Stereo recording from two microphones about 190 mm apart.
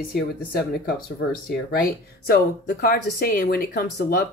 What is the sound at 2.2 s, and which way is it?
Speech, 55° left (ahead or behind).